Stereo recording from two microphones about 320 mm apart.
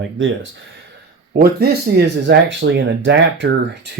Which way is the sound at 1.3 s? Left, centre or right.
Right.